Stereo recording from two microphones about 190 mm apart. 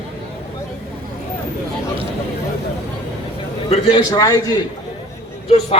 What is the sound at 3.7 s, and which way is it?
Speech, 25° left (ahead or behind).